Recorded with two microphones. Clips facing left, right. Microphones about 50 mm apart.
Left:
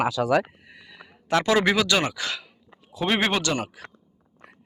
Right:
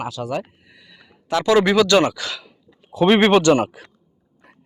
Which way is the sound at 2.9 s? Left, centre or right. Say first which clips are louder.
Right 9 dB; right.